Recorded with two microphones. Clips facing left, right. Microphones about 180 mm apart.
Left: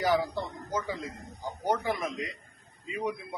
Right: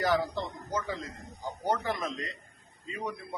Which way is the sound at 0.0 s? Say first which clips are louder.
Left 1 dB; 10° left (ahead or behind).